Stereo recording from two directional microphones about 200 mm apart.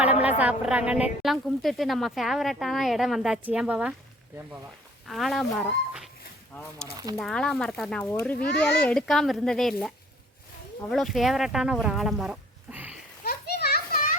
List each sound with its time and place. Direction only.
0.0 s a woman's voice: 5° right (ahead or behind)
5.0 s a woman's voice: centre (ahead or behind)
13.2 s children playing: 50° left (ahead or behind)